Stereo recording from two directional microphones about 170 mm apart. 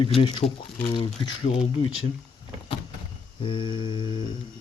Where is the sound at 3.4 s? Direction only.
30° left (ahead or behind).